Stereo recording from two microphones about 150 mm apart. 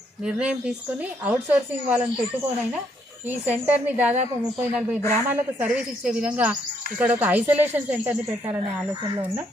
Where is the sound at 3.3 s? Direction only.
10° right (ahead or behind).